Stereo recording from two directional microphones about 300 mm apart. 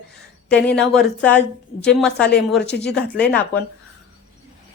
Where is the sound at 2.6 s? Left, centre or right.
Left.